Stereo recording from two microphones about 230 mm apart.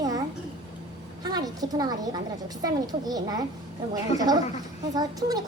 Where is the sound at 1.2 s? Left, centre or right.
Centre.